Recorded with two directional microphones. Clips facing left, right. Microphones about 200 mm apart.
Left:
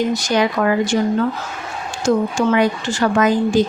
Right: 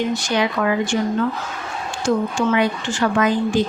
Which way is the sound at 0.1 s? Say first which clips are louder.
Left 3 dB; 40° left (ahead or behind).